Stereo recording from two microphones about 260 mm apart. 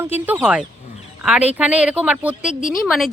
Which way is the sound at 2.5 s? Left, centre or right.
Left.